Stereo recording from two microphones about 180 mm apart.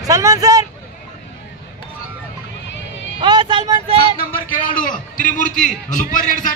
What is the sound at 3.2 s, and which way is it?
Music, 25° right (ahead or behind).